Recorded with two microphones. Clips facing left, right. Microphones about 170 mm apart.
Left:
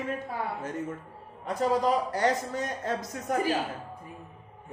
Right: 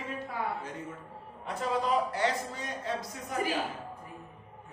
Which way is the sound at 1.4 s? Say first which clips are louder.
Left 6 dB; 40° left (ahead or behind).